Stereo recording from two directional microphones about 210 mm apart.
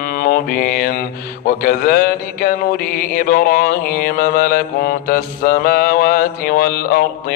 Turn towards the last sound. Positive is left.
turn(degrees=40)  # may be behind; listen again after turning